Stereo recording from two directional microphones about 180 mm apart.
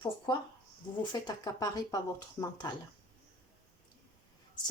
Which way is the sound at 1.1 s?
20° left (ahead or behind).